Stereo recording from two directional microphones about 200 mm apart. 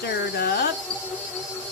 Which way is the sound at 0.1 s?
50° left (ahead or behind).